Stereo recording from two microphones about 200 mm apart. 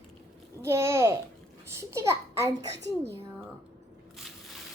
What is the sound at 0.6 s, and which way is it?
A child's voice, 15° right (ahead or behind).